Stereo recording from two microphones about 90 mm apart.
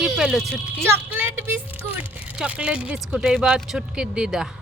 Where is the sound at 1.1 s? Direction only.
20° right (ahead or behind).